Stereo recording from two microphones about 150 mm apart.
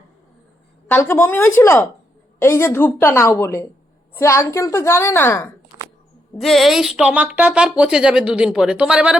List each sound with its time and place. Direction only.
0.9 s a woman's voice: 15° left (ahead or behind)
6.3 s speech: centre (ahead or behind)